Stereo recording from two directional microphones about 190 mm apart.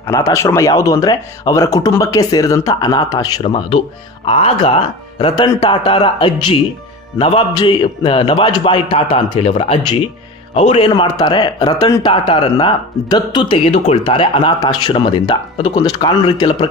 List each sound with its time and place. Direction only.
0.0 s speech: 15° left (ahead or behind)